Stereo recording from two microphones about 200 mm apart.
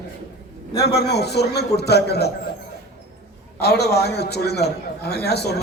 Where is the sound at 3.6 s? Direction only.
55° left (ahead or behind).